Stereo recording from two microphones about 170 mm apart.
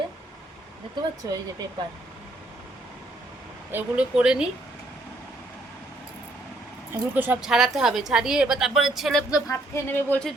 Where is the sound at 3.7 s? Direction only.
10° right (ahead or behind).